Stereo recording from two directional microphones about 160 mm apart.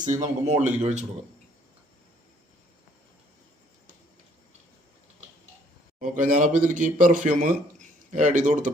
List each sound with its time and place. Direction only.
0.0 s a man's voice: 50° right (ahead or behind)
6.0 s a man's voice: 55° right (ahead or behind)